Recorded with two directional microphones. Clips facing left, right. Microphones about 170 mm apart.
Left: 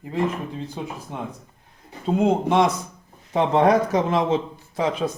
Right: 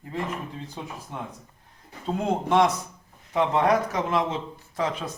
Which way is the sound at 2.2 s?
20° left (ahead or behind).